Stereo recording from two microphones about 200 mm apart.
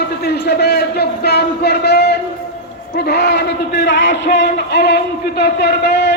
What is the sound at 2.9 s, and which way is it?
A man's voice, 55° left (ahead or behind).